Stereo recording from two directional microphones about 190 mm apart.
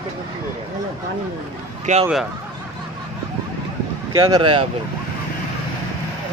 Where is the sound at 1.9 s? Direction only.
40° right (ahead or behind).